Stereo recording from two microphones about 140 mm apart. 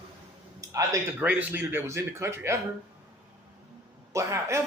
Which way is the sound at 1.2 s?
10° right (ahead or behind).